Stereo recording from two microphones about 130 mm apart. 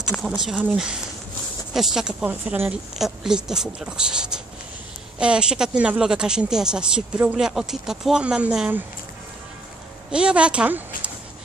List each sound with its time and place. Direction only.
0.2 s speech: 5° right (ahead or behind)
10.1 s a woman's voice: 10° right (ahead or behind)